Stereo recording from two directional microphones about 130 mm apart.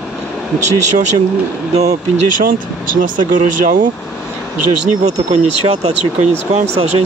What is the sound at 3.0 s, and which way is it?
Speech, 85° right.